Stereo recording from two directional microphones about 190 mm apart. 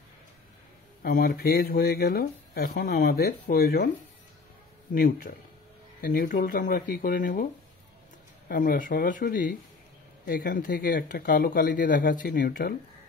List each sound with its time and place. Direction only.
1.0 s speech: 50° left (ahead or behind)
4.9 s speech: 50° left (ahead or behind)
8.5 s speech: 45° left (ahead or behind)